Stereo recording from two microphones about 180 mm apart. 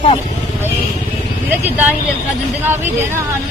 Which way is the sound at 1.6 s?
10° right (ahead or behind).